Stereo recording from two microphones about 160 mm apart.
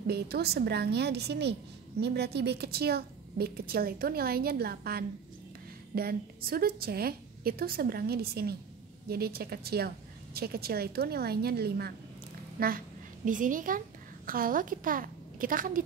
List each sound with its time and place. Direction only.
0.0 s a woman's voice: 85° right
12.5 s a child's voice: 65° right (ahead or behind)